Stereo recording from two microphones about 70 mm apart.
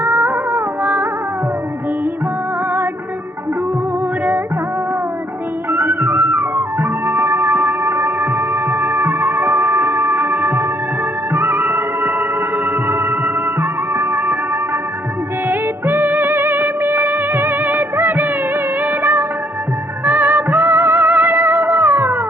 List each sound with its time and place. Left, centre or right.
0.0 s music: right
5.7 s music: right
7.4 s music: right
7.9 s music: right
15.4 s music: right
17.9 s music of bollywood: right
20.1 s music: right